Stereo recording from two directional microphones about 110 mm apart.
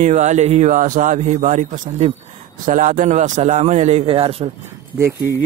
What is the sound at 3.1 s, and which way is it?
Speech, 90° right.